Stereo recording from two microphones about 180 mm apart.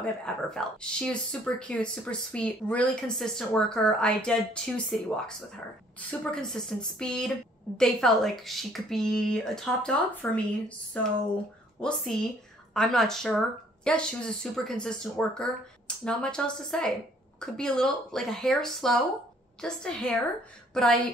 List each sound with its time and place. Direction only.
0.0 s a woman's voice: 5° left (ahead or behind)
11.8 s a woman's voice: 5° left (ahead or behind)